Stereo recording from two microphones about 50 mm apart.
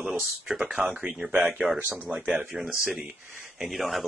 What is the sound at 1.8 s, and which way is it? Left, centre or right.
Speech, right.